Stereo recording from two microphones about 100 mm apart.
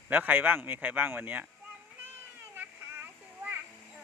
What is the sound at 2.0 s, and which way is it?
Children playing, 20° right (ahead or behind).